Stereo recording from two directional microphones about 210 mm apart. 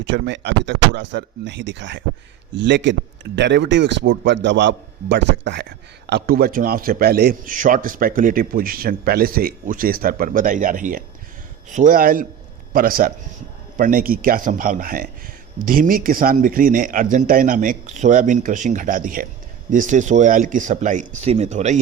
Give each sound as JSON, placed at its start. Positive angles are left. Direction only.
{"t": 0.0, "sound": "a man's voice", "side_deg": -55}